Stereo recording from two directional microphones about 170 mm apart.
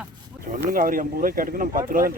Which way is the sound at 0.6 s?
55° right (ahead or behind).